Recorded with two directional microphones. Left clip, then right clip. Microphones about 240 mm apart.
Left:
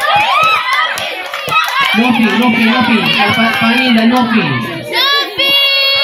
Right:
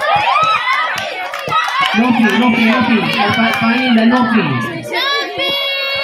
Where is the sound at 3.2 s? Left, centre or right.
Left.